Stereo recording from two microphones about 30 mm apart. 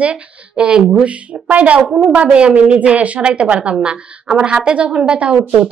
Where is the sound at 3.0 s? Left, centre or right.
Right.